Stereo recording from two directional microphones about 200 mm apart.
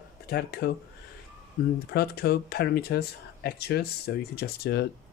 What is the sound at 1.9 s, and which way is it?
Speech, 50° left (ahead or behind).